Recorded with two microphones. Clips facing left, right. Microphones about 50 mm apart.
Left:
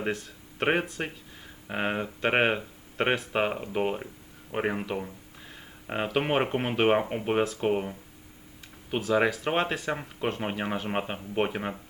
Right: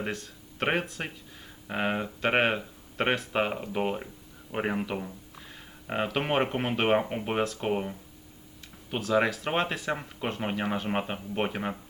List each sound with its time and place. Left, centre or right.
0.0 s speech: centre